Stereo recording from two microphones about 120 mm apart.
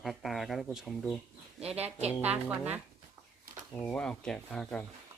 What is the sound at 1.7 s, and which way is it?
A woman's voice, 10° right (ahead or behind).